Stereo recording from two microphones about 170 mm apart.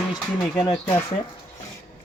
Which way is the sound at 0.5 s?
15° left (ahead or behind).